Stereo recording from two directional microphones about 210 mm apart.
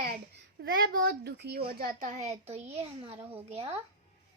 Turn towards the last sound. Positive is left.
turn(degrees=-30)  # may be behind; listen again after turning